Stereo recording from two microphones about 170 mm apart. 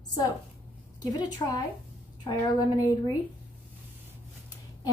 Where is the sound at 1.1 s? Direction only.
25° left (ahead or behind).